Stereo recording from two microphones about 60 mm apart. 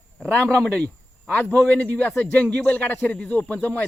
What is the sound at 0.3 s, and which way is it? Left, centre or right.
A man's voice, centre.